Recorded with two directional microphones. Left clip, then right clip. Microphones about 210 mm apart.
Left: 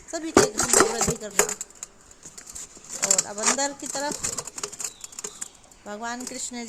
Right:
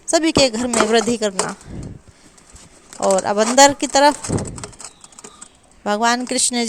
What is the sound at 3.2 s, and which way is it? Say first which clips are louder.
Speech: right 14 dB; 40° right (ahead or behind).